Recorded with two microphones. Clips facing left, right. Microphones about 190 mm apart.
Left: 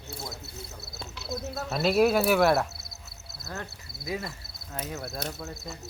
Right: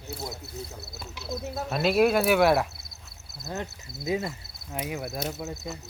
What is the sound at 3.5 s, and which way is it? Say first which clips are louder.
Speech: right 4 dB; 20° right (ahead or behind).